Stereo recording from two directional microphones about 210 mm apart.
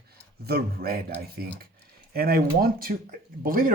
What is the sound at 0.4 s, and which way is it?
Speech, 45° right (ahead or behind).